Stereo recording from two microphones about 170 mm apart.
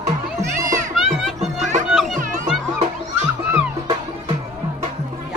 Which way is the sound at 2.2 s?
50° right (ahead or behind).